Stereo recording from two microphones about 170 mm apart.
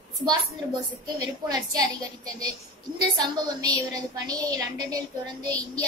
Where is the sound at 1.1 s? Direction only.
20° right (ahead or behind).